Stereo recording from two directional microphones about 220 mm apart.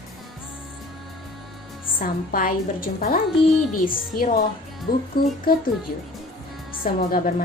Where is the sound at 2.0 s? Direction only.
40° left (ahead or behind).